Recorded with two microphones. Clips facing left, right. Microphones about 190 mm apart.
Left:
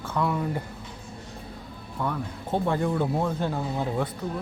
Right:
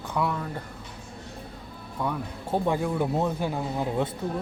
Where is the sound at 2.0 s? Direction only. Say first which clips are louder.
Even; 10° right (ahead or behind).